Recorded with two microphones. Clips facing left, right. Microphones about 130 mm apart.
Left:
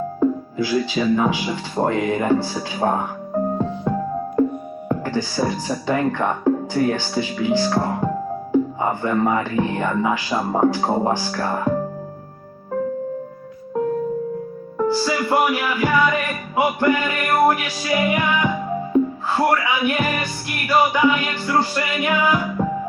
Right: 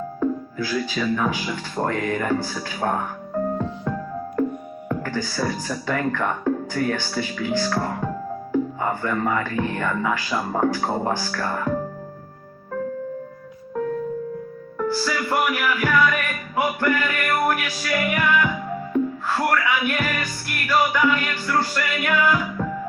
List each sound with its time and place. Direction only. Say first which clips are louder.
0.2 s speech: left 4 dB; 20° left (ahead or behind)
14.8 s music: left 4 dB; 20° left (ahead or behind)